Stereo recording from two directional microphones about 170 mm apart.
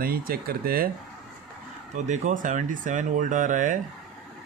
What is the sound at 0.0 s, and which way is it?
Speech, 60° right (ahead or behind).